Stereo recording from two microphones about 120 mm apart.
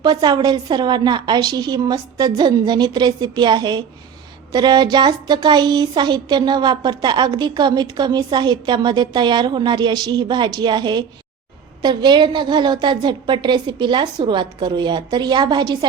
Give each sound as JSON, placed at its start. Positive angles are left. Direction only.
{"t": 0.0, "sound": "a woman's voice", "side_deg": -35}